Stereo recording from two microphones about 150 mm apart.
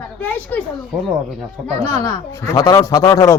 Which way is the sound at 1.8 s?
20° left (ahead or behind).